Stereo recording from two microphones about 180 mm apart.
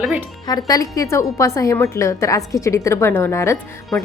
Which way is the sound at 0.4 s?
20° left (ahead or behind).